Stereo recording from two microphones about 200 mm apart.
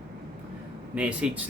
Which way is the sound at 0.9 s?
5° right (ahead or behind).